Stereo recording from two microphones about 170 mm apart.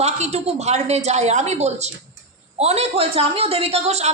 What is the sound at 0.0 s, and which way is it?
A woman's voice, 40° right (ahead or behind).